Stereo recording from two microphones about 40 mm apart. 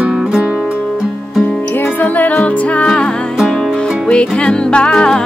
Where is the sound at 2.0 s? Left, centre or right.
Left.